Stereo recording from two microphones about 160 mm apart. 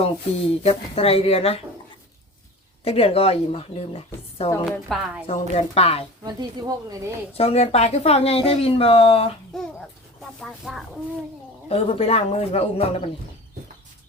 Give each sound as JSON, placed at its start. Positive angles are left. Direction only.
{"t": 0.0, "sound": "speech", "side_deg": 40}
{"t": 2.8, "sound": "speech", "side_deg": 40}
{"t": 4.6, "sound": "speech", "side_deg": 0}
{"t": 5.2, "sound": "speech", "side_deg": 40}
{"t": 6.2, "sound": "speech", "side_deg": -25}
{"t": 7.3, "sound": "speech", "side_deg": 40}
{"t": 9.5, "sound": "speech", "side_deg": 5}
{"t": 11.7, "sound": "speech", "side_deg": 40}